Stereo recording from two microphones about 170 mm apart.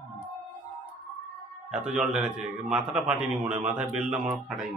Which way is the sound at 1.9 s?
5° right (ahead or behind).